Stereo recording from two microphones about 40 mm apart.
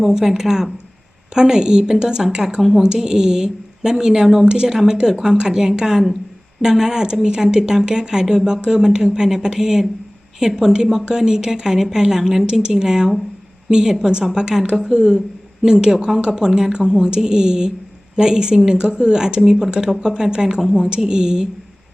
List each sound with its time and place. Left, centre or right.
0.0 s a woman's voice: centre